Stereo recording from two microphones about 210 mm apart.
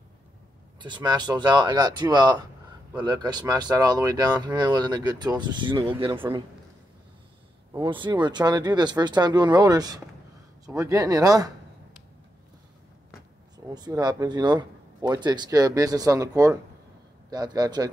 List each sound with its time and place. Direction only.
0.7 s speech: 20° right (ahead or behind)
7.7 s speech: 20° right (ahead or behind)
13.7 s speech: 20° right (ahead or behind)